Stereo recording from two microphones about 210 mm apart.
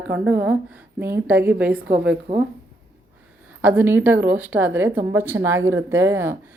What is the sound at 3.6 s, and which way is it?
A woman's voice, 10° right (ahead or behind).